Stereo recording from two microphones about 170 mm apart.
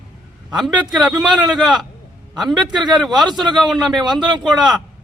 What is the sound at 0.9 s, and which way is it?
Speech, 5° right (ahead or behind).